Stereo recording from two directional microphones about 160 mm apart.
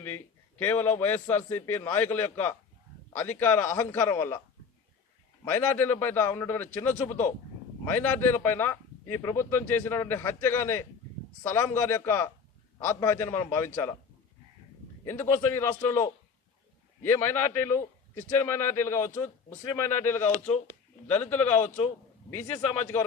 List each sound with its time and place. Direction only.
0.6 s speech: 15° left (ahead or behind)
5.5 s speech: 15° left (ahead or behind)
15.0 s speech: 15° left (ahead or behind)